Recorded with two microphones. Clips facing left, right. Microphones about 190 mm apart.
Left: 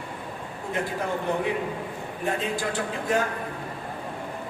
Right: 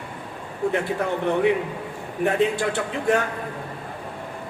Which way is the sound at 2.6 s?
65° right (ahead or behind).